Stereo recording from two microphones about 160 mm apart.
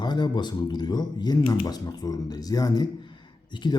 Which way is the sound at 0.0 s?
25° left (ahead or behind).